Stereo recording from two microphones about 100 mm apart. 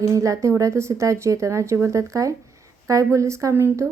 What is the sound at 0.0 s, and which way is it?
Speech, 35° right (ahead or behind).